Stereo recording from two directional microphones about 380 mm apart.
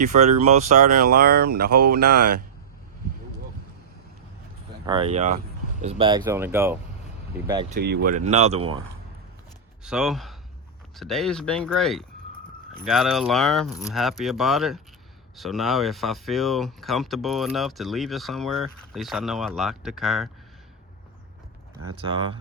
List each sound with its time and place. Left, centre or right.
0.0 s speech: centre
4.9 s speech: centre
7.8 s speech: right
9.8 s speech: centre
22.0 s speech: centre